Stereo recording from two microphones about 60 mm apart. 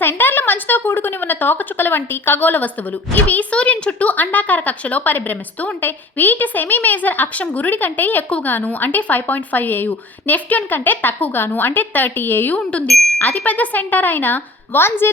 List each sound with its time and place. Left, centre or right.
0.0 s a woman's voice: left
12.5 s a woman's voice: centre
12.9 s speech: centre
13.1 s a woman's voice: left